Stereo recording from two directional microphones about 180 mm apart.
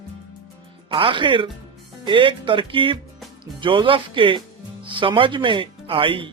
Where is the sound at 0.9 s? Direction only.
30° right (ahead or behind).